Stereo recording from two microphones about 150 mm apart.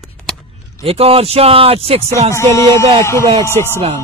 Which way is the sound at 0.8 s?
40° right (ahead or behind).